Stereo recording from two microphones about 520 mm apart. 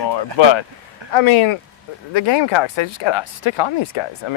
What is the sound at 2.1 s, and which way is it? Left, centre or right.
Speech, left.